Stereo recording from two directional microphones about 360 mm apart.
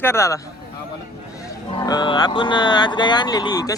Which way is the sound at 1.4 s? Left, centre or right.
Centre.